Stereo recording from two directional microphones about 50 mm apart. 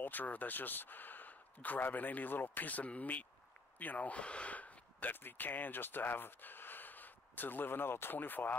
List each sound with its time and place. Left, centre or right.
0.0 s speech: left